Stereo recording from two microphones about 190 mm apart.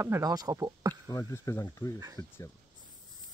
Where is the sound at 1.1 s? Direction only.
15° left (ahead or behind).